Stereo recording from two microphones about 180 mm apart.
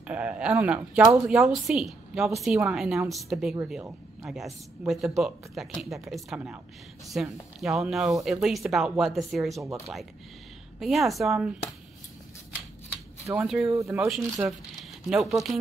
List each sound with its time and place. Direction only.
0.0 s speech: 5° right (ahead or behind)
10.8 s speech: centre (ahead or behind)
13.3 s speech: 5° right (ahead or behind)
13.7 s speech: 15° right (ahead or behind)
13.9 s speech: centre (ahead or behind)